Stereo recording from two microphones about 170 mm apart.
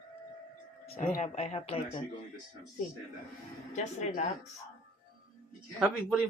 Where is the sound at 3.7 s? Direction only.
45° left (ahead or behind).